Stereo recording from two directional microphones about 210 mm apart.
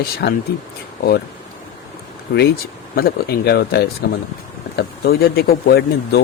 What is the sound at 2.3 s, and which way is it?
Speech, 50° left (ahead or behind).